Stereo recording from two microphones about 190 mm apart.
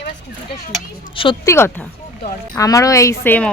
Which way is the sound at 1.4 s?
15° left (ahead or behind).